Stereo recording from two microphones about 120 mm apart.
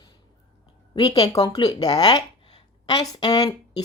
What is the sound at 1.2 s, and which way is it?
A woman's voice, 30° left (ahead or behind).